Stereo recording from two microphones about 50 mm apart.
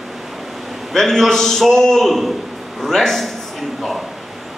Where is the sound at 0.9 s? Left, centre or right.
Centre.